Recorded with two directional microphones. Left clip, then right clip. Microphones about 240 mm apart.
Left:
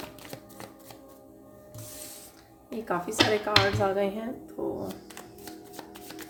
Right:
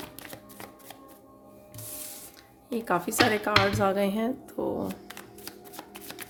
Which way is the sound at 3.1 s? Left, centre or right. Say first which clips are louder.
Left 1 dB; right.